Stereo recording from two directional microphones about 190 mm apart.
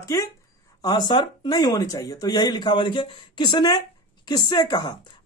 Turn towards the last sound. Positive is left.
turn(degrees=20)  # may be behind; listen again after turning